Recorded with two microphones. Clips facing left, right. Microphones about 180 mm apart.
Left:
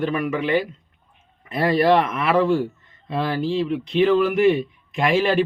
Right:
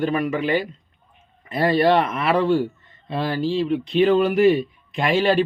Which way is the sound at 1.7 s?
30° right (ahead or behind).